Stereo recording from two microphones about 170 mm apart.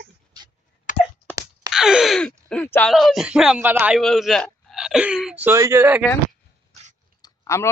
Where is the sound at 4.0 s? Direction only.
Centre (ahead or behind).